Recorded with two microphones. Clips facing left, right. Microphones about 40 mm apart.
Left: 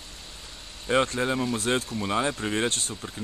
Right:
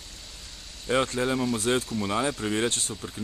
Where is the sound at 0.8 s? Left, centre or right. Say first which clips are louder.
Left 1 dB; centre.